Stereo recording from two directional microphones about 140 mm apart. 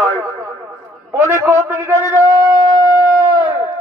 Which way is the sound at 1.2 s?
20° left (ahead or behind).